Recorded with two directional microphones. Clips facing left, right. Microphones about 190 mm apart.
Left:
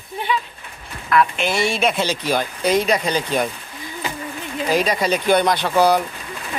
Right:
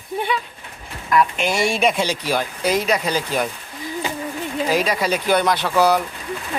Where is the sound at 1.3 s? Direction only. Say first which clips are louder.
Even; 45° right (ahead or behind).